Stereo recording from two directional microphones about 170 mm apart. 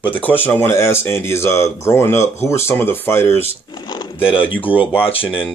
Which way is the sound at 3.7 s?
25° left (ahead or behind).